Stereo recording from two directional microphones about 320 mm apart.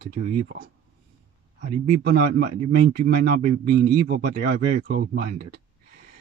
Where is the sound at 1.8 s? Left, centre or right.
Right.